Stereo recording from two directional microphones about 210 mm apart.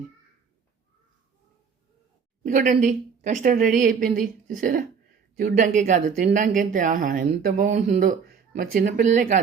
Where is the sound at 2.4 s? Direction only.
40° right (ahead or behind).